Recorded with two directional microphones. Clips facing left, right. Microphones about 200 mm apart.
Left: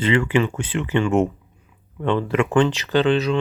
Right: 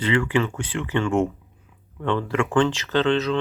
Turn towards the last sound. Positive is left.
turn(degrees=10)  # may be behind; listen again after turning